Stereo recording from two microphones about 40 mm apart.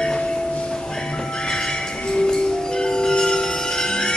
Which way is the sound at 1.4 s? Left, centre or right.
Centre.